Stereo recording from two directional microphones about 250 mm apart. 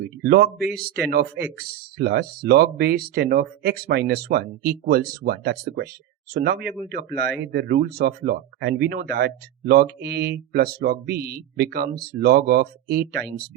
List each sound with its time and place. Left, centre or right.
0.2 s speech: right